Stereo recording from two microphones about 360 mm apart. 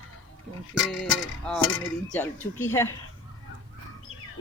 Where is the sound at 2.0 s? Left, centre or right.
Centre.